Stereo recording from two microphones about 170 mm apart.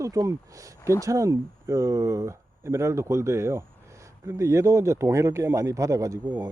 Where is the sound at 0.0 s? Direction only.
20° right (ahead or behind).